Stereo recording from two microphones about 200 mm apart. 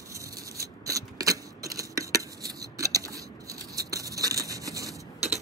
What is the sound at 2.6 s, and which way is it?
Scissors, 15° right (ahead or behind).